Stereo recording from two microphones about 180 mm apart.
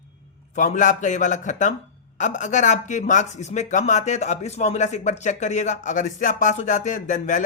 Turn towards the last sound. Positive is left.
turn(degrees=45)  # may be behind; listen again after turning